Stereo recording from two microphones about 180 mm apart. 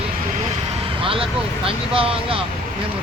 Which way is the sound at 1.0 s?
30° right (ahead or behind).